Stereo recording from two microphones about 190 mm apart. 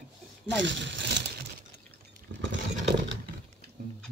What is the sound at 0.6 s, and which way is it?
Speech, 70° right (ahead or behind).